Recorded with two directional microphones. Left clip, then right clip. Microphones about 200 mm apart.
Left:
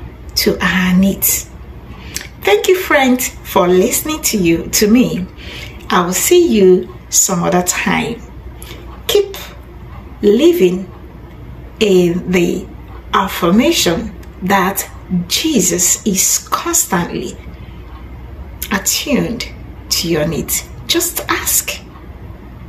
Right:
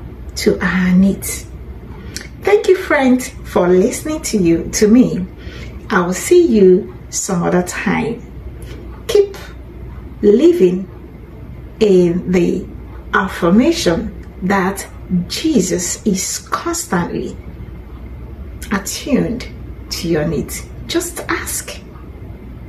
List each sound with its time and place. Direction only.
0.3 s a woman's voice: 5° right (ahead or behind)
2.1 s a woman's voice: 5° right (ahead or behind)
9.0 s a sound: 5° right (ahead or behind)
10.2 s a woman's voice: 5° right (ahead or behind)
11.8 s a woman's voice: 5° right (ahead or behind)
18.6 s a woman's voice: 5° right (ahead or behind)